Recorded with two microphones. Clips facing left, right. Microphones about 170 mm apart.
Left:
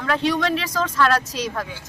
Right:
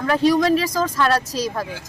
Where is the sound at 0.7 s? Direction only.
10° right (ahead or behind).